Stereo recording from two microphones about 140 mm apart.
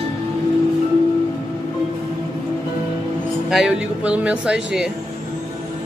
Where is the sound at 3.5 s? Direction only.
5° right (ahead or behind).